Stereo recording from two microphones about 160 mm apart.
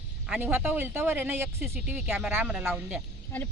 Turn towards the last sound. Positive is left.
turn(degrees=10)  # may be behind; listen again after turning